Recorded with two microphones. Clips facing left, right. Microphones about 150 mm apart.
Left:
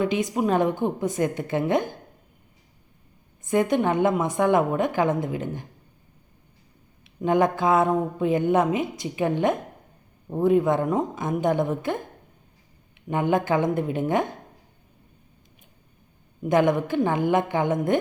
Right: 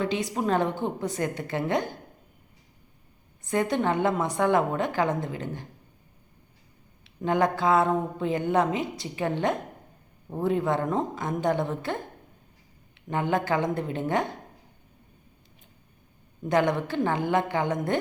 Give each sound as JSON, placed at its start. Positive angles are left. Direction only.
{"t": 0.0, "sound": "a woman's voice", "side_deg": 20}
{"t": 3.5, "sound": "speech", "side_deg": 15}
{"t": 7.0, "sound": "speech", "side_deg": 15}
{"t": 13.1, "sound": "speech", "side_deg": 15}
{"t": 16.4, "sound": "speech", "side_deg": 20}